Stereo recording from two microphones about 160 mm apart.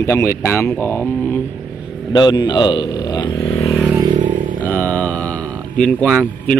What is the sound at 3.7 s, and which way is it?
Vehicle, 5° right (ahead or behind).